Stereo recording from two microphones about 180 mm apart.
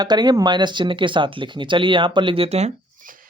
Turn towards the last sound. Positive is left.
turn(degrees=-50)  # may be behind; listen again after turning